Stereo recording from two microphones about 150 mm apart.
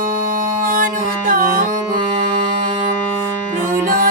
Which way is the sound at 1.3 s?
70° right (ahead or behind).